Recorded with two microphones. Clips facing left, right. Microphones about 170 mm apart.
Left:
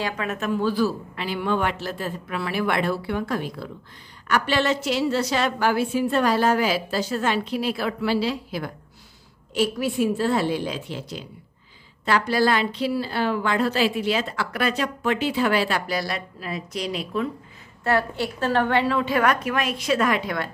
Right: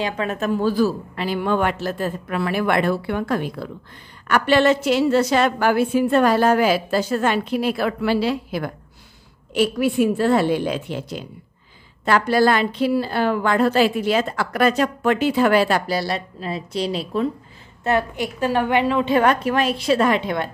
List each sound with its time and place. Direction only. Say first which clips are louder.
0.2 s a woman's voice: right 4 dB; 35° right (ahead or behind)
15.9 s a woman's voice: right 4 dB; 30° right (ahead or behind)
17.8 s a woman's voice: right 2 dB; 20° right (ahead or behind)